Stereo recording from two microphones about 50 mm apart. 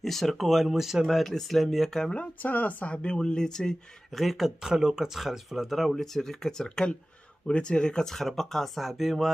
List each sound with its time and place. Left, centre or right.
0.0 s speech: centre
2.4 s speech: left; by 4.2 s centre
4.2 s speech: centre